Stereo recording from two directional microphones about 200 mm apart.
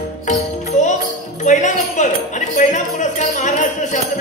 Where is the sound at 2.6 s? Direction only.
35° left (ahead or behind).